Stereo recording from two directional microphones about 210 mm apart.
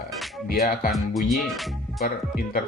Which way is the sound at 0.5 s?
45° left (ahead or behind).